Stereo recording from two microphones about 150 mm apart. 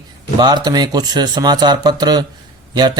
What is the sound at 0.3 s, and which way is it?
Speech, 30° right (ahead or behind).